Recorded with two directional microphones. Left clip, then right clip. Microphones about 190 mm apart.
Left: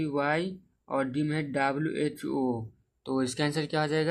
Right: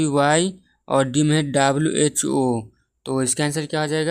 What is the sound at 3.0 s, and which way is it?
Speech, 35° right (ahead or behind).